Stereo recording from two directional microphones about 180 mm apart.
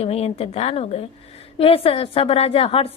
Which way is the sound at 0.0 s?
35° left (ahead or behind).